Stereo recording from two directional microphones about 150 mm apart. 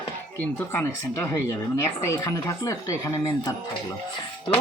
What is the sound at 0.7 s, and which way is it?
Speech, 15° left (ahead or behind).